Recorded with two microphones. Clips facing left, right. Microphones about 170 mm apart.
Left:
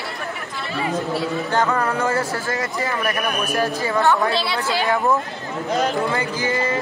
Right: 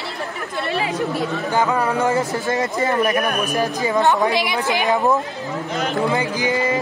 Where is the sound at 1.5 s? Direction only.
10° right (ahead or behind).